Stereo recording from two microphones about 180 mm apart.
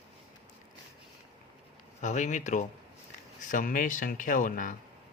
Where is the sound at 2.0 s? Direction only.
40° left (ahead or behind).